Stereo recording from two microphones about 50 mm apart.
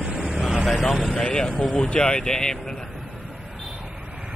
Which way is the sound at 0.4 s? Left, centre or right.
Centre.